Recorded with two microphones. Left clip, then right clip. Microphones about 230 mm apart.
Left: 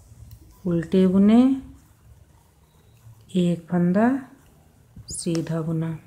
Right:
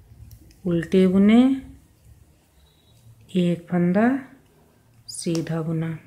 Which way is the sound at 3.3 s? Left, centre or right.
Centre.